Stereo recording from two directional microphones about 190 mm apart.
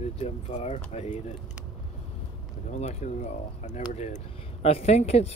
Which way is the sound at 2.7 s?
40° left (ahead or behind).